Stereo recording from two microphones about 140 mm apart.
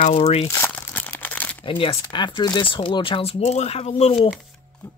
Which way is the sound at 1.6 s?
40° left (ahead or behind).